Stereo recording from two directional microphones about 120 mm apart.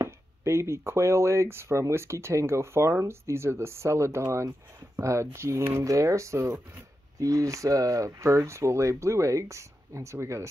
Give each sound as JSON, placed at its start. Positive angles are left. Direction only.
{"t": 0.0, "sound": "speech", "side_deg": -20}